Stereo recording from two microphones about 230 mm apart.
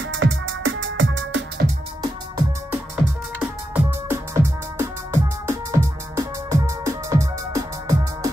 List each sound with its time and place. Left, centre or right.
0.0 s music: right
3.3 s music: centre